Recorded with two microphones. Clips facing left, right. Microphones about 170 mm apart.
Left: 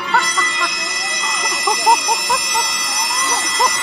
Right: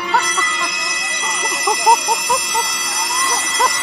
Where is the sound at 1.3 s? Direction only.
35° right (ahead or behind).